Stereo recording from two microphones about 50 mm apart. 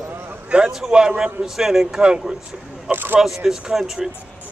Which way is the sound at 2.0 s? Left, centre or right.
Centre.